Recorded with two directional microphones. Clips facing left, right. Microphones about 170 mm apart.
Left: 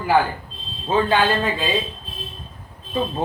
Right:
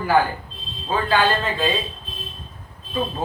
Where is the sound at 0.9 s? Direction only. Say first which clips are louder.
Left 4 dB; 25° left (ahead or behind).